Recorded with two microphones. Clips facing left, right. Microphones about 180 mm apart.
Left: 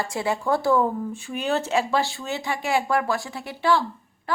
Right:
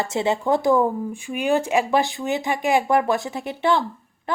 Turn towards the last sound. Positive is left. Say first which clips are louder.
# right 1 dB
turn(degrees=-20)  # may be behind; listen again after turning